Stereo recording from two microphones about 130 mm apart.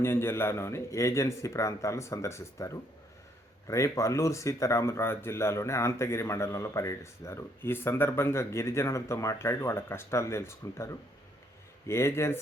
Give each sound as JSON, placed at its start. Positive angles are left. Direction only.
{"t": 0.0, "sound": "speech", "side_deg": 20}